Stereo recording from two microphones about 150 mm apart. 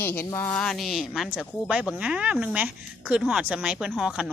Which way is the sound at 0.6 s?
Centre (ahead or behind).